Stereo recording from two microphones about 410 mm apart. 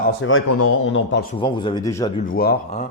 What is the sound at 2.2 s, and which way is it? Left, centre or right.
Speech, left.